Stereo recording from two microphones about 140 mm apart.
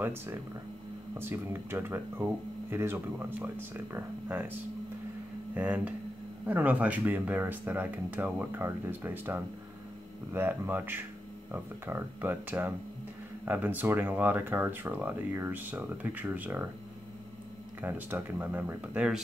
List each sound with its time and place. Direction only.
0.0 s speech: 15° right (ahead or behind)
17.8 s speech: 15° right (ahead or behind)